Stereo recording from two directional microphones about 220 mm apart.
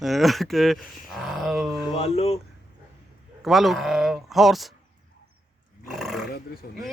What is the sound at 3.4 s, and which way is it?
Speech, centre (ahead or behind).